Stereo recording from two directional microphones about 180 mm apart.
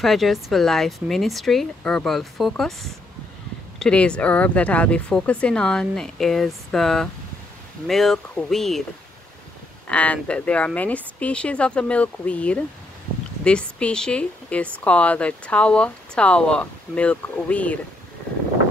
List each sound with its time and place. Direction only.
0.0 s speech: centre (ahead or behind)
9.8 s a woman's voice: 5° left (ahead or behind)